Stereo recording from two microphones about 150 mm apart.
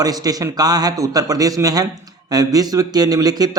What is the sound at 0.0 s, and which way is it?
Speech, 25° right (ahead or behind).